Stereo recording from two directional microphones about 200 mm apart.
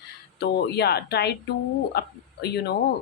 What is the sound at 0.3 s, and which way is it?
Speech, 55° left (ahead or behind).